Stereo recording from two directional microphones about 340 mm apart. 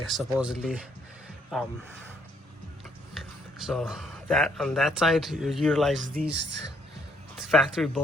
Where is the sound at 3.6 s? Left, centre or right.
Centre.